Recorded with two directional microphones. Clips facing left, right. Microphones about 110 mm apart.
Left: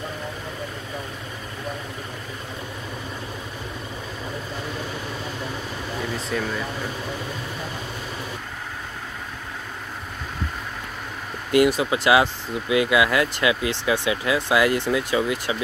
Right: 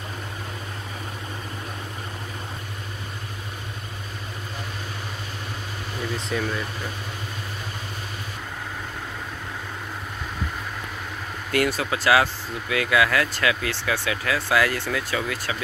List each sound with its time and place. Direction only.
6.1 s speech: centre (ahead or behind)
11.5 s speech: 15° left (ahead or behind)